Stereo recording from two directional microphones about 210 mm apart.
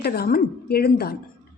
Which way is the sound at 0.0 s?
45° left (ahead or behind).